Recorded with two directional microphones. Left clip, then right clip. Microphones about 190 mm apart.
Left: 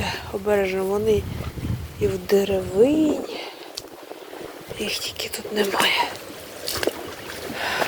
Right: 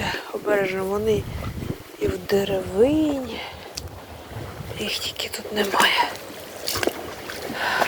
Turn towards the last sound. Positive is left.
turn(degrees=50)  # may be behind; listen again after turning